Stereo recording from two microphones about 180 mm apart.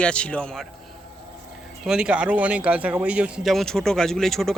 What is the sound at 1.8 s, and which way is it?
Speech, 5° right (ahead or behind).